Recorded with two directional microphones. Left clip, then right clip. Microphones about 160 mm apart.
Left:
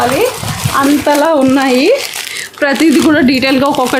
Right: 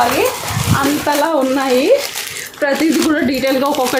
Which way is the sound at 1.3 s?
90° left.